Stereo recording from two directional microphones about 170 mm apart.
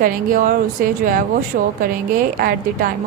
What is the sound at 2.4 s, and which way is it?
Speech, 60° right (ahead or behind).